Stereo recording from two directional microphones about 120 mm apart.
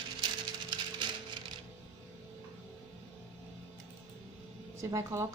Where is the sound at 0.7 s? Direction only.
40° right (ahead or behind).